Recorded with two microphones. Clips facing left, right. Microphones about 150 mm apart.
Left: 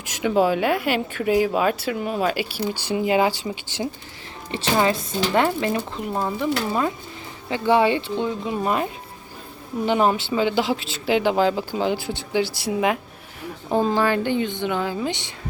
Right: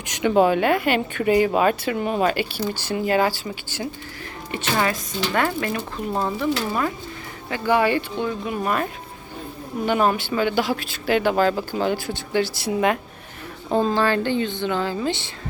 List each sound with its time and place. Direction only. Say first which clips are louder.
0.0 s speech: right 2 dB; 5° left (ahead or behind)